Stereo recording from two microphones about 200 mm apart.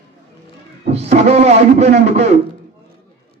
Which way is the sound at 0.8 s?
30° right (ahead or behind).